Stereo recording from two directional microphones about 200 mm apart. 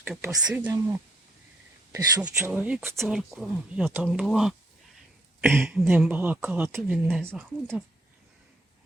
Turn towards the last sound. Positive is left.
turn(degrees=-10)  # may be behind; listen again after turning